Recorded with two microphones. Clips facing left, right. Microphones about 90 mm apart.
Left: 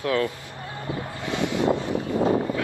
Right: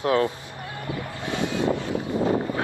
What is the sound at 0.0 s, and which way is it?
Speech, 25° right (ahead or behind).